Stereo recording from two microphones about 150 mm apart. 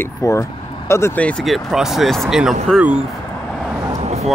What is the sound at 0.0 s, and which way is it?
Speech, 20° left (ahead or behind).